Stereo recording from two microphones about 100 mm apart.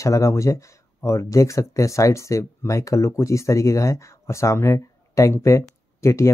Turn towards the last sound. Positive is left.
turn(degrees=30)  # may be behind; listen again after turning